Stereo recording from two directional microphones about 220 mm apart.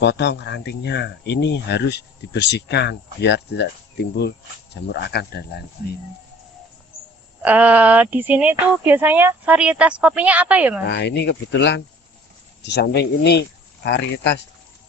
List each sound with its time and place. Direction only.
0.0 s speech: 50° left (ahead or behind)
7.4 s speech: 5° right (ahead or behind)
10.8 s speech: 50° left (ahead or behind)